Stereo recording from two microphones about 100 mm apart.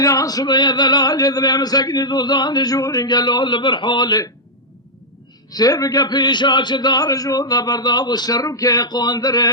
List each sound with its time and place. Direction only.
0.0 s male singing: 35° left (ahead or behind)
5.5 s male singing: 40° left (ahead or behind)